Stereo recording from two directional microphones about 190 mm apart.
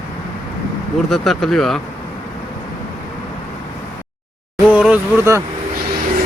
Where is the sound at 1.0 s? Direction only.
Centre (ahead or behind).